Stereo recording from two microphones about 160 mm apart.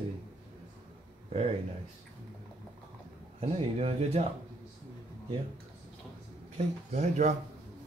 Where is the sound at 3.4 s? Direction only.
40° right (ahead or behind).